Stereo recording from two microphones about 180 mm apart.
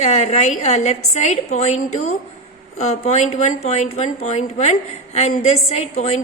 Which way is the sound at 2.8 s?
40° left (ahead or behind).